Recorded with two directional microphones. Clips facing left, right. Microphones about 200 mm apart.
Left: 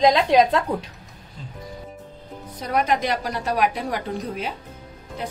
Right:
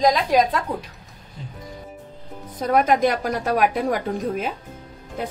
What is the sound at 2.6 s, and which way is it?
A woman's voice, 50° right (ahead or behind).